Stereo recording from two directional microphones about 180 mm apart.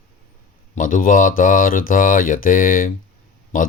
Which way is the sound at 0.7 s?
45° left (ahead or behind).